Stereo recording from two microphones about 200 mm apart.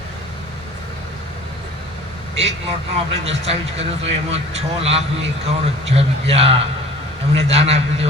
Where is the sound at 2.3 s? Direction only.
30° right (ahead or behind).